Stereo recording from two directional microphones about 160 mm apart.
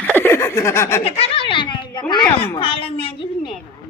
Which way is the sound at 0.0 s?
10° left (ahead or behind).